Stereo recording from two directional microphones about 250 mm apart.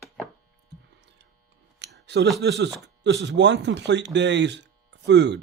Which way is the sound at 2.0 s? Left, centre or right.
Right.